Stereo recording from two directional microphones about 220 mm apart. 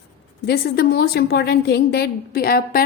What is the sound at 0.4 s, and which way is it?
A woman's voice, 45° left (ahead or behind).